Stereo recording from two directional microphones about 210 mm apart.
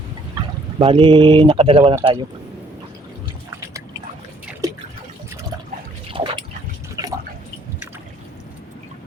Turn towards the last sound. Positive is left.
turn(degrees=-15)  # may be behind; listen again after turning